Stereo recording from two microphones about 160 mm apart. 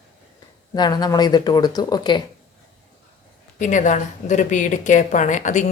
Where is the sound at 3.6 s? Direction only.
50° left (ahead or behind).